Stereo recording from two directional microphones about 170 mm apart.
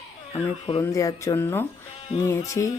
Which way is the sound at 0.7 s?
20° left (ahead or behind).